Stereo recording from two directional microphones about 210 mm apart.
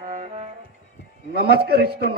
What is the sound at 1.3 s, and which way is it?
Speech, 50° right (ahead or behind).